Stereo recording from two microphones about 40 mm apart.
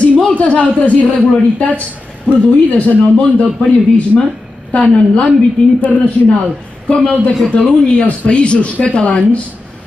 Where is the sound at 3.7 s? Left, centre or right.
Left.